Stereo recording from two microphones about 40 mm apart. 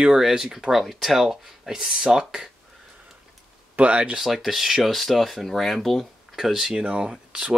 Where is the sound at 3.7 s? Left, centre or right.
Right.